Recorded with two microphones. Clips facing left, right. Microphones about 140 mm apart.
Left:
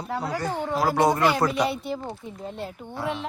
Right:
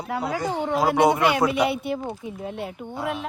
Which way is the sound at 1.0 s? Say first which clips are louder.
Right 1 dB; 10° right (ahead or behind).